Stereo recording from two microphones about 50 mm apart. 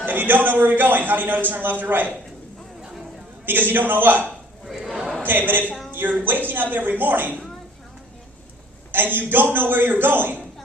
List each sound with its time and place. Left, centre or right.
0.0 s a man's voice: right
3.4 s a man's voice: right
4.6 s crowd: centre
5.2 s a man's voice: right
8.9 s a man's voice: right